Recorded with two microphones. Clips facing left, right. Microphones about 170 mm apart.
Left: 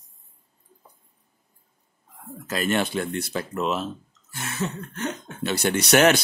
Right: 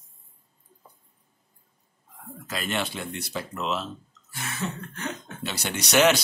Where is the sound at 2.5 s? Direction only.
45° left (ahead or behind).